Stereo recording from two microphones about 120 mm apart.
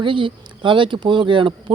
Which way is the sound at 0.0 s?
45° right (ahead or behind).